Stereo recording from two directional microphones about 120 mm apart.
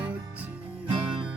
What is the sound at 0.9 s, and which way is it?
Music, 45° right (ahead or behind).